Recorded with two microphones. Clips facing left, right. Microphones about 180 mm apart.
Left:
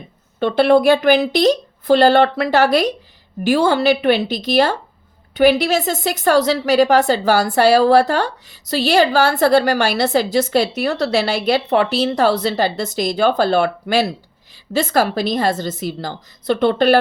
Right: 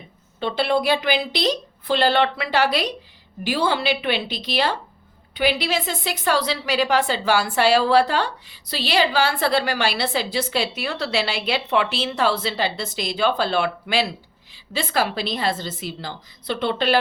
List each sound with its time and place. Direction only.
0.3 s a woman's voice: 50° left (ahead or behind)